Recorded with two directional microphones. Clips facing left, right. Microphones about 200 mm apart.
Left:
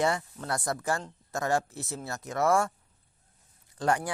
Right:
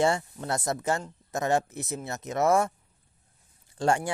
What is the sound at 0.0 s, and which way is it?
Speech, 25° right (ahead or behind).